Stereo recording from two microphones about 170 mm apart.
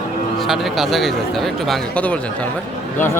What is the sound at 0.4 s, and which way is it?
Speech, centre (ahead or behind).